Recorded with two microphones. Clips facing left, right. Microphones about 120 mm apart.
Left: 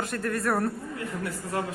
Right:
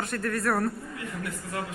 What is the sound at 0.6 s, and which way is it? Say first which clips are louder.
A woman's voice: left 1 dB; 30° left (ahead or behind).